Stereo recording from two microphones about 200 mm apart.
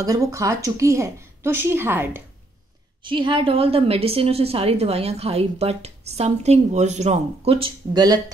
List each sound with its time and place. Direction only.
0.0 s a woman's voice: 15° right (ahead or behind)
3.0 s a woman's voice: 25° right (ahead or behind)